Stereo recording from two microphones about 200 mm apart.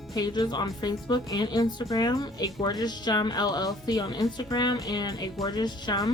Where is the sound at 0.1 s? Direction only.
20° left (ahead or behind).